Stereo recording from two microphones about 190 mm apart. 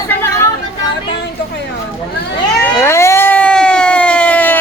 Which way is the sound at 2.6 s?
15° left (ahead or behind).